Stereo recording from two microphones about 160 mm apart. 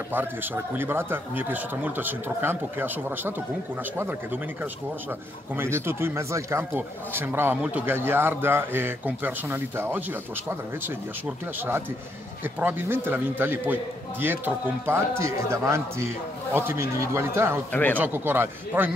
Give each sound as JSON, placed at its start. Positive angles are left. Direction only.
{"t": 0.1, "sound": "speech", "side_deg": -15}
{"t": 5.6, "sound": "speech", "side_deg": -15}
{"t": 11.2, "sound": "speech", "side_deg": -15}